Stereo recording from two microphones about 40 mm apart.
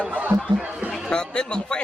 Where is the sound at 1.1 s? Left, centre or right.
Left.